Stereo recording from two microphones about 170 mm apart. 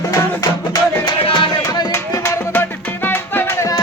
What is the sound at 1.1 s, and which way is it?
Music, 25° left (ahead or behind).